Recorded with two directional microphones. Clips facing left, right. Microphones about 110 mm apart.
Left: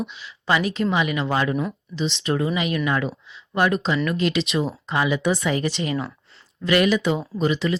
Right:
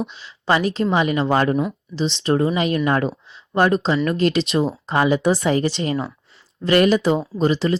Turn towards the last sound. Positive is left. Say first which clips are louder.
# right 3 dB
turn(degrees=-35)  # may be behind; listen again after turning